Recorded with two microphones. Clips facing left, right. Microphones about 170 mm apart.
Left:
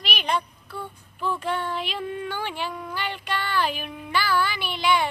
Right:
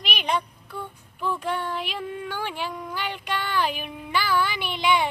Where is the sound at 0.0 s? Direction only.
15° right (ahead or behind).